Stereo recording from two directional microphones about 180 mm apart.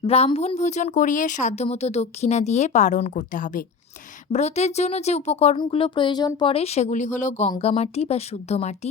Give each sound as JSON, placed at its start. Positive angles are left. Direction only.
{"t": 0.0, "sound": "speech", "side_deg": 35}